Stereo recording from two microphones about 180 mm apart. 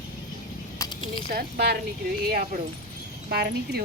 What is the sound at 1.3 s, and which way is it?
Speech, 60° right (ahead or behind).